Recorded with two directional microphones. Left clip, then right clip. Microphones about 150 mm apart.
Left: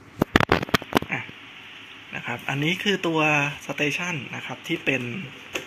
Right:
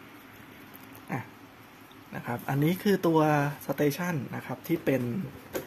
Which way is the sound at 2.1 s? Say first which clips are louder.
Left 5 dB; 15° right (ahead or behind).